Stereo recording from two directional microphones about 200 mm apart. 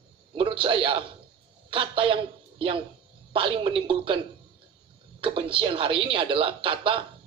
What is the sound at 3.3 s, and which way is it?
Speech, 25° right (ahead or behind).